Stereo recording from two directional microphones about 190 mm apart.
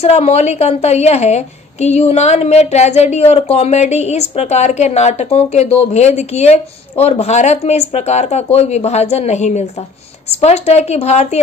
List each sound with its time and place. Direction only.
0.0 s a woman's voice: 35° left (ahead or behind)